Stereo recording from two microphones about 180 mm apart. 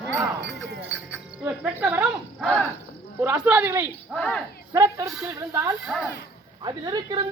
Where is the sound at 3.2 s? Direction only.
10° right (ahead or behind).